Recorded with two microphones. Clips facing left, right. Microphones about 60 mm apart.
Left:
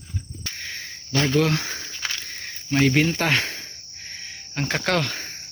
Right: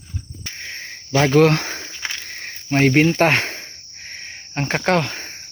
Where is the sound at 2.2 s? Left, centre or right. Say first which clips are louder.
Right 3 dB; right.